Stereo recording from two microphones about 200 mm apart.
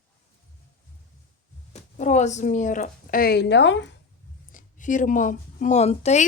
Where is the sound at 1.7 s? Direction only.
35° left (ahead or behind); by 3.9 s 65° left (ahead or behind).